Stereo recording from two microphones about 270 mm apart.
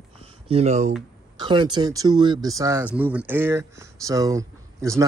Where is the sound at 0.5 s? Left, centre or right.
Right.